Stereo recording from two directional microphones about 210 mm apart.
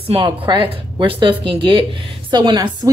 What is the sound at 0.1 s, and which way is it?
A woman's voice, 25° right (ahead or behind).